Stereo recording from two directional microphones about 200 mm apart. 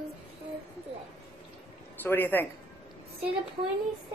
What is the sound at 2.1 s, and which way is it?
Speech, 10° left (ahead or behind).